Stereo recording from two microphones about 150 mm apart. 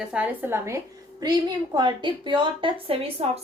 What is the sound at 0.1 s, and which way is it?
Speech, 10° right (ahead or behind).